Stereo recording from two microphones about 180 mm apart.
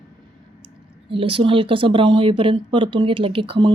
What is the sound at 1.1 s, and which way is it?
Speech, 30° right (ahead or behind).